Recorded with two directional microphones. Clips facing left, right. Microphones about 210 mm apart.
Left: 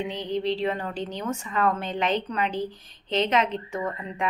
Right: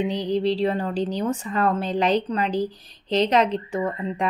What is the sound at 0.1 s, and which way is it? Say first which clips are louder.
A woman's voice: right 5 dB; 35° right (ahead or behind).